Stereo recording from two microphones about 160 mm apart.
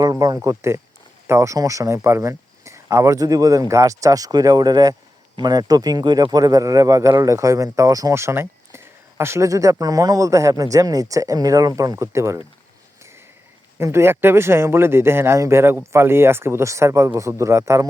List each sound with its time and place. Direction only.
0.0 s speech: 25° right (ahead or behind)
13.0 s a sound: 15° right (ahead or behind)
13.7 s speech: 15° right (ahead or behind)